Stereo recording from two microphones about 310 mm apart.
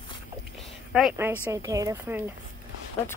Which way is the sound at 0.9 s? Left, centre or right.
Centre.